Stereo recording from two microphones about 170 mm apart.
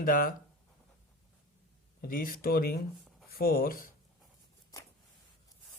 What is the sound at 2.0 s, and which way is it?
Speech, 55° left (ahead or behind).